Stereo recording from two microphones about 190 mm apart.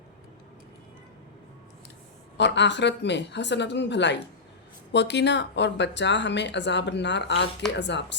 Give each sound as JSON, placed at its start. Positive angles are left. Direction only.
{"t": 2.4, "sound": "speech", "side_deg": 65}